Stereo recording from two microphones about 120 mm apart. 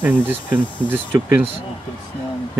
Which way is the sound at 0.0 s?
15° right (ahead or behind).